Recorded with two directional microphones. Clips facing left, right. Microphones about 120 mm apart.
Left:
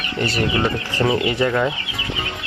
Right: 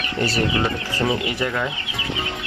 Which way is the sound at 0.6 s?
Centre (ahead or behind).